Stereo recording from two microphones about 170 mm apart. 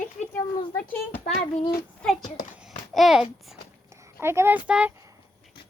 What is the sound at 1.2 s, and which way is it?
Speech, 40° left (ahead or behind).